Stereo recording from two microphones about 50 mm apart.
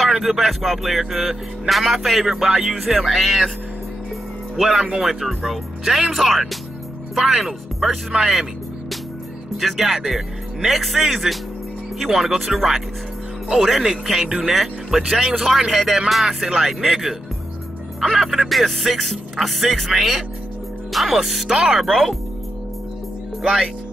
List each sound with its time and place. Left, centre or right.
0.0 s speech: centre
4.6 s speech: centre
9.6 s speech: centre